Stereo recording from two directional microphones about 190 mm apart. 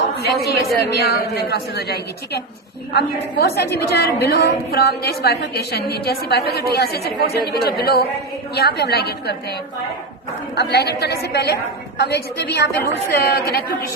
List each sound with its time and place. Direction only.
0.4 s a woman's voice: 60° left (ahead or behind)
10.5 s a woman's voice: 60° left (ahead or behind)